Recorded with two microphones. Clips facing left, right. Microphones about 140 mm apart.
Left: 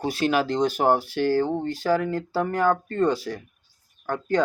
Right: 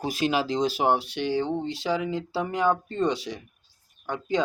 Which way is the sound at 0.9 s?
70° right (ahead or behind).